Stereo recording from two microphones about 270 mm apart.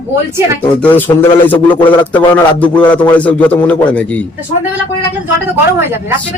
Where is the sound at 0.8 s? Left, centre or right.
Centre.